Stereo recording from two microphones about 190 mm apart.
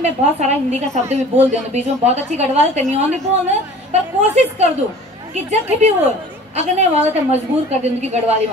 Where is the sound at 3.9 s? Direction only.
35° right (ahead or behind).